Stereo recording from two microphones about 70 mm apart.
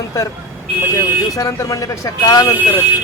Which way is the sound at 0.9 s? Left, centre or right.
Left.